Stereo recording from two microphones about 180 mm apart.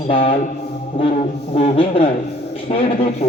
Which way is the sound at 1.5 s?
35° left (ahead or behind).